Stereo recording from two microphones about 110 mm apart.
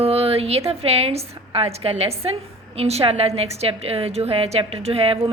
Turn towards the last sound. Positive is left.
turn(degrees=-60)  # may be behind; listen again after turning